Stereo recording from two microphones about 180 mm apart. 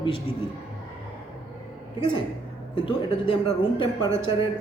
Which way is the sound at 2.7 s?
30° left (ahead or behind).